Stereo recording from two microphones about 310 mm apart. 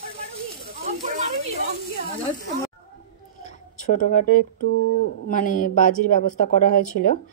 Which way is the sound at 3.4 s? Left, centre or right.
Left.